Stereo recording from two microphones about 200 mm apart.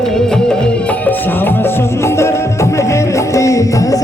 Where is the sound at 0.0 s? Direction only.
5° left (ahead or behind).